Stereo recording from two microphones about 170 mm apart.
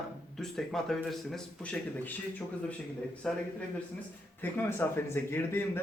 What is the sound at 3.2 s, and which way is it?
A man's voice, 5° left (ahead or behind).